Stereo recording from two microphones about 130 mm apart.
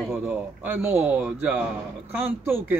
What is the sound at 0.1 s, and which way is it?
Speech, 15° right (ahead or behind).